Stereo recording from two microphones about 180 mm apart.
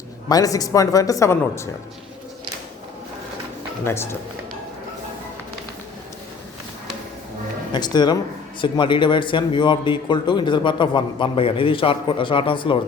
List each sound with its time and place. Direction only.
0.3 s a man's voice: 20° left (ahead or behind)
3.8 s speech: 15° left (ahead or behind)
7.7 s a man's voice: 25° left (ahead or behind)